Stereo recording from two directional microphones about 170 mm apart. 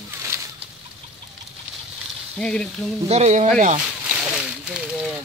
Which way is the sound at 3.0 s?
40° right (ahead or behind).